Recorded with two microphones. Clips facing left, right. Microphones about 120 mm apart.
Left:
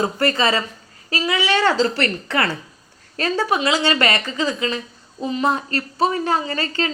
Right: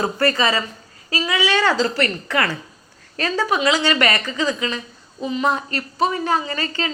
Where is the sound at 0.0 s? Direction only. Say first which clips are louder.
Even; 25° left (ahead or behind).